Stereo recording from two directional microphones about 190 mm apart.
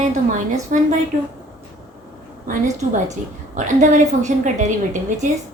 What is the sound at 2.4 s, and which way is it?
A woman's voice, 40° right (ahead or behind).